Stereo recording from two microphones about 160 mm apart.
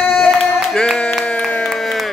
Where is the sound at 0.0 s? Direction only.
Centre (ahead or behind).